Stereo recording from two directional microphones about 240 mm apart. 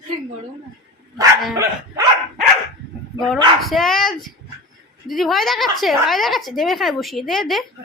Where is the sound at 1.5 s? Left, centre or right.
Centre.